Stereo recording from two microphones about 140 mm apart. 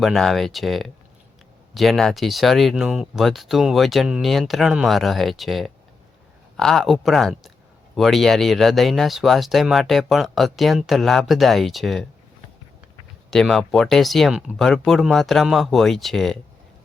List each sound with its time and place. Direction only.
0.0 s speech: centre (ahead or behind)
13.3 s speech: 5° left (ahead or behind)